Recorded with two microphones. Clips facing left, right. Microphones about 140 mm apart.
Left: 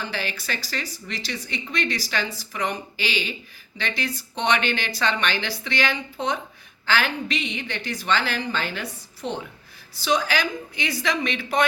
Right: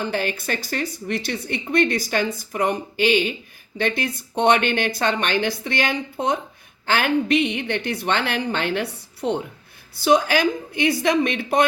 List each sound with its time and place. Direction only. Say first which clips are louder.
0.0 s a woman's voice: right 6 dB; 50° right (ahead or behind)